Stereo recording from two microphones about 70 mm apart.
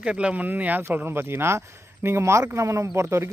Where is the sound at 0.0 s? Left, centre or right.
Centre.